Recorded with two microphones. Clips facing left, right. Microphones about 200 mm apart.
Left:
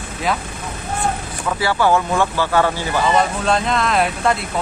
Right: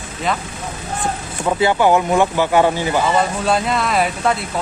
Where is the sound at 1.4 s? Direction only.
20° right (ahead or behind).